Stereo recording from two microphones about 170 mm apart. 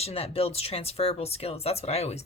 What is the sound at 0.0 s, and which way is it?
Speech, 35° left (ahead or behind).